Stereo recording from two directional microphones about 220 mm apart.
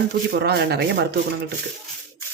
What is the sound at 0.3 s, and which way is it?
Speech, 45° right (ahead or behind).